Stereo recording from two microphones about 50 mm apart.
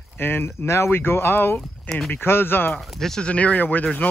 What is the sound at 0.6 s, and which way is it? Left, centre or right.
Speech, left.